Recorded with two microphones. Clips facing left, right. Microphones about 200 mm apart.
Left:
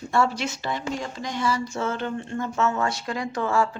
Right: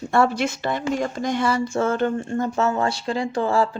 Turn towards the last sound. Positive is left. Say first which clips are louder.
# right 3 dB
turn(degrees=-30)  # may be behind; listen again after turning